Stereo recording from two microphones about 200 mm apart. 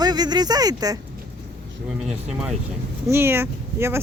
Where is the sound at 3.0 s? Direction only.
10° right (ahead or behind).